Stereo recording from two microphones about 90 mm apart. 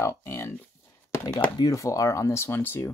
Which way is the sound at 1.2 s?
50° left (ahead or behind).